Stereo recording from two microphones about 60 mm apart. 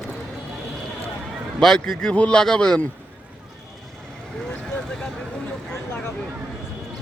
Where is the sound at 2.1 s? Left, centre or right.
Centre.